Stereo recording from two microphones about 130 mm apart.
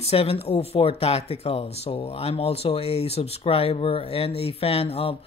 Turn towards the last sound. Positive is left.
turn(degrees=50)  # may be behind; listen again after turning